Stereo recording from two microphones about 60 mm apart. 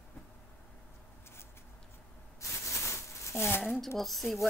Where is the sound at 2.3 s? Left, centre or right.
Left.